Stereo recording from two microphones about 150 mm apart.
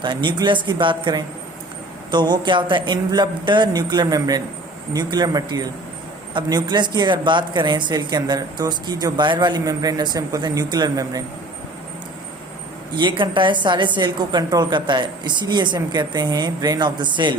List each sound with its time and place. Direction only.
0.0 s a woman's voice: 30° right (ahead or behind)
13.0 s a woman's voice: 30° right (ahead or behind)